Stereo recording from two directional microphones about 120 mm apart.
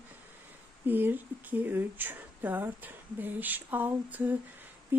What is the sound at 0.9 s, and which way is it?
Speech, 15° right (ahead or behind).